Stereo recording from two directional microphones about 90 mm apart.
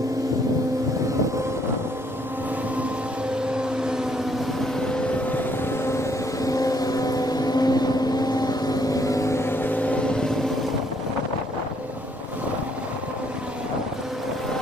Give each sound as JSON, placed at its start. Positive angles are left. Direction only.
{"t": 3.5, "sound": "vehicle", "side_deg": -5}
{"t": 5.3, "sound": "vehicle", "side_deg": 25}